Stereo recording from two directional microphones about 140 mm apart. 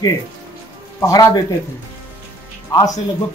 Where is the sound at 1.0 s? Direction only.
25° left (ahead or behind).